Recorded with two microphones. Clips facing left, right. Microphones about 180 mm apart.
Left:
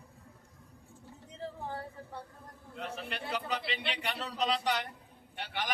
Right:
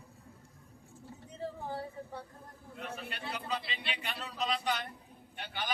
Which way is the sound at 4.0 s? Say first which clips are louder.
Left 2 dB; 80° left.